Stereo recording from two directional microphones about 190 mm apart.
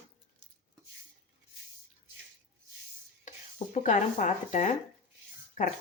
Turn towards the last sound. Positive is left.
turn(degrees=45)  # may be behind; listen again after turning